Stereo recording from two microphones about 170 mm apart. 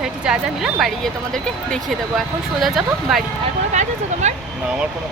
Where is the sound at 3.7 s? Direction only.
45° right (ahead or behind).